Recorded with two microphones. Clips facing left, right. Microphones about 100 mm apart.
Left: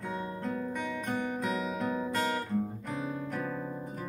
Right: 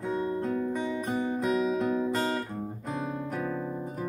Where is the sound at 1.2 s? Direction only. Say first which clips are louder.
Right 8 dB; 20° right (ahead or behind).